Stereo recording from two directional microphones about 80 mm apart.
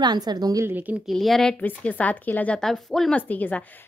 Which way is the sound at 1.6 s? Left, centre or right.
Centre.